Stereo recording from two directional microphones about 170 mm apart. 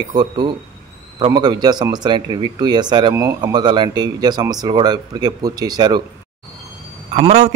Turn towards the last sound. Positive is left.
turn(degrees=-40)  # may be behind; listen again after turning